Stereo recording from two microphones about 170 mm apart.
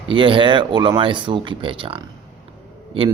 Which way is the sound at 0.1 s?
30° right (ahead or behind).